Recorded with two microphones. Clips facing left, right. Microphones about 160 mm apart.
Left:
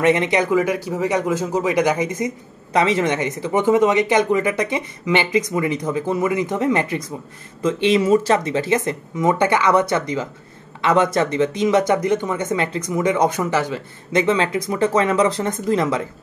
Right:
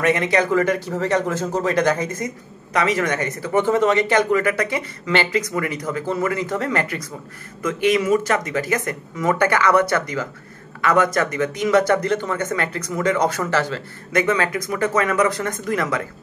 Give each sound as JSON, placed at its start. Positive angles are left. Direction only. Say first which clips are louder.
{"t": 0.0, "sound": "speech", "louder": "left 2 dB", "side_deg": 25}